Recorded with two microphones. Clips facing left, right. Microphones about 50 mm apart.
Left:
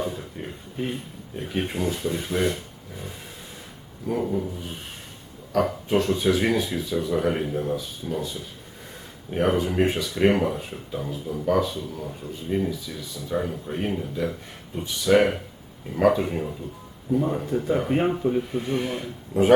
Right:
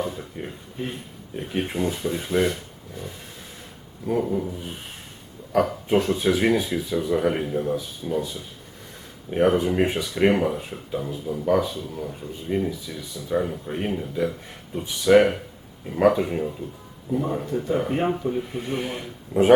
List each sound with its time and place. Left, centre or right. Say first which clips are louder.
0.4 s a sound: right 1 dB; centre
1.4 s speech: right 1 dB; centre
4.2 s speech: right 1 dB; centre
5.5 s speech: right 2 dB; centre
9.3 s speech: right 3 dB; centre
18.5 s speech: left 2 dB; centre